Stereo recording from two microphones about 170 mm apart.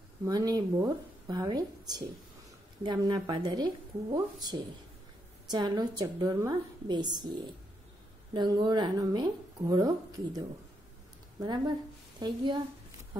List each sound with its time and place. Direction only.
0.2 s speech: 20° right (ahead or behind)